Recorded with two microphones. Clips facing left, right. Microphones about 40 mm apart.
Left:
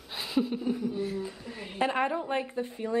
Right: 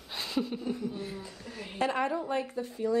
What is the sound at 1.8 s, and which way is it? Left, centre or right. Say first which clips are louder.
A woman's voice: left 2 dB; left.